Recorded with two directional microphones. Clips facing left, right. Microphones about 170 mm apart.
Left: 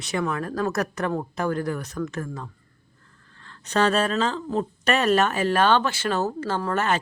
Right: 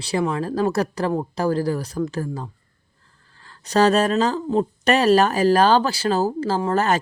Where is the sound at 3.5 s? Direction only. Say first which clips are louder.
Right 5 dB; 35° right (ahead or behind).